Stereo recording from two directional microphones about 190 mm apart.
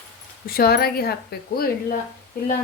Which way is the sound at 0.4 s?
55° left (ahead or behind).